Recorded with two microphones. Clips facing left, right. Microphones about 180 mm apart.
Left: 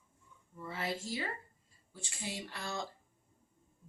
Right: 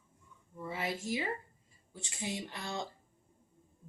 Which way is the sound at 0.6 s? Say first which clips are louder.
Right 1 dB; 15° right (ahead or behind).